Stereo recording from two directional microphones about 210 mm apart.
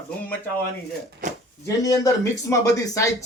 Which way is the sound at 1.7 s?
15° left (ahead or behind).